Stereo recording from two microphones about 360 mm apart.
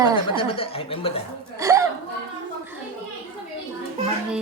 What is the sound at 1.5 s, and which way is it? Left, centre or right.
Speech, centre.